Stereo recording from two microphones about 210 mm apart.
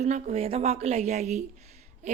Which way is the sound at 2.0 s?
35° right (ahead or behind).